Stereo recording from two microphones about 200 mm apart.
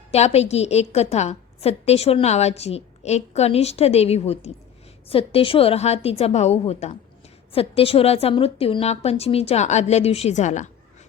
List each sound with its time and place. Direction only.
0.1 s a woman's voice: 30° left (ahead or behind)